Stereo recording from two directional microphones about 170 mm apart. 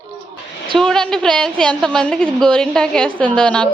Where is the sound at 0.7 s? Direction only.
5° left (ahead or behind).